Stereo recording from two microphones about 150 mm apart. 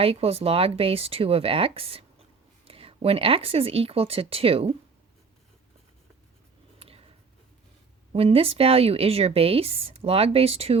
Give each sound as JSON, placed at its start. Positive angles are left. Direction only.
{"t": 0.0, "sound": "speech", "side_deg": -40}
{"t": 6.7, "sound": "a sound", "side_deg": -40}
{"t": 8.1, "sound": "speech", "side_deg": -40}